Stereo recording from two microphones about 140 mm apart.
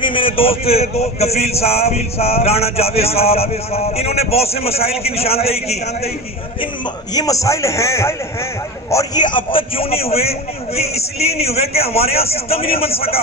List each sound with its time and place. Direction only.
0.0 s a man's voice: 40° left (ahead or behind)
7.2 s a man's voice: 25° left (ahead or behind)
8.9 s a man's voice: 30° left (ahead or behind)